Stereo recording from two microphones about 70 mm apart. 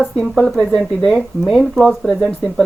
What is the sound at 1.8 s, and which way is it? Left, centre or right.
Speech, centre.